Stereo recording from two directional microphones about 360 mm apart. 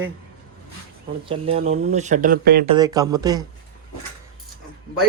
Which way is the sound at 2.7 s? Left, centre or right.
Centre.